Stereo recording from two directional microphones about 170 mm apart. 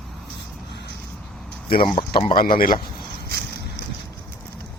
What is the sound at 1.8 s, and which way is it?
Speech, 30° left (ahead or behind).